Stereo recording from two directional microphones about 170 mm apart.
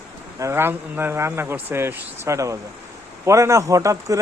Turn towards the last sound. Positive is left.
turn(degrees=-20)  # may be behind; listen again after turning